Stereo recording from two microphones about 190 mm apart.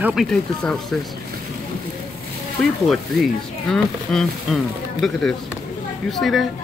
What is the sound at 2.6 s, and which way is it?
Speech, centre (ahead or behind).